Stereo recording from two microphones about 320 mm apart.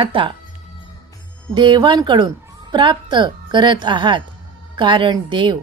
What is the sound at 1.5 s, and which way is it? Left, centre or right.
A woman's voice, centre.